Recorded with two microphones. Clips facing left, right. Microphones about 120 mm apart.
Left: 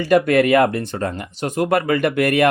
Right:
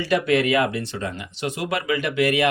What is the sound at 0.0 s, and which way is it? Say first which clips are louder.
Speech: left 5 dB; 50° left (ahead or behind).